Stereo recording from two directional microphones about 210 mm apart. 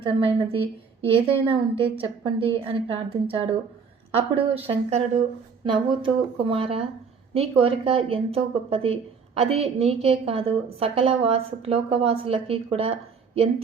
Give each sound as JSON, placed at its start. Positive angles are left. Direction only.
{"t": 0.0, "sound": "a woman's voice", "side_deg": -25}